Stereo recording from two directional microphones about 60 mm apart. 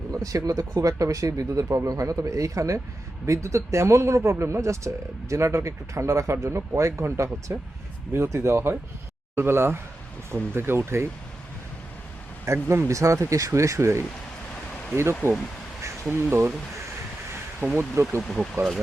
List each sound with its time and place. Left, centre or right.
0.1 s speech: right
12.6 s speech: right
17.7 s speech: right